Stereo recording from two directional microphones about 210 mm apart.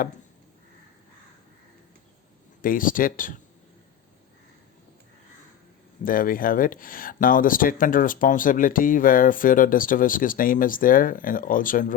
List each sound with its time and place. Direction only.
2.6 s speech: 40° left (ahead or behind)
6.1 s speech: 40° left (ahead or behind)